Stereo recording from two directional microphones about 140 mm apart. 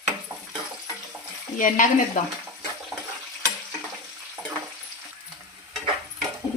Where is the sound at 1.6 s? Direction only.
65° left (ahead or behind).